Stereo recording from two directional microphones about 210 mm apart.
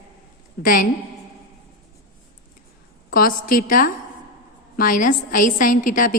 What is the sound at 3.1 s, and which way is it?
A woman's voice, 40° left (ahead or behind).